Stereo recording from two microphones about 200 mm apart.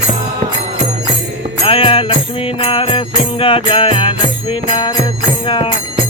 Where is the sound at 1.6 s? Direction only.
25° left (ahead or behind).